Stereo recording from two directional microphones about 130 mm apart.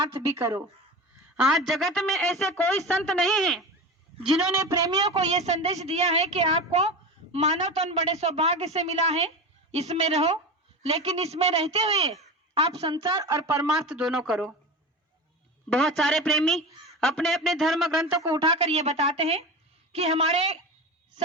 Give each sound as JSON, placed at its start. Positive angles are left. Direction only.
{"t": 0.0, "sound": "speech", "side_deg": -25}
{"t": 1.4, "sound": "a man's voice", "side_deg": 0}
{"t": 4.5, "sound": "speech", "side_deg": -25}
{"t": 5.1, "sound": "a woman's voice", "side_deg": -55}
{"t": 12.9, "sound": "speech", "side_deg": -35}
{"t": 13.8, "sound": "a man's voice", "side_deg": -5}
{"t": 15.7, "sound": "a man's voice", "side_deg": 0}
{"t": 18.4, "sound": "a woman's voice", "side_deg": -50}